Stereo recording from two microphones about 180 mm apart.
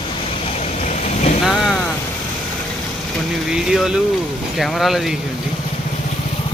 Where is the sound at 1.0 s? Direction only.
40° left (ahead or behind).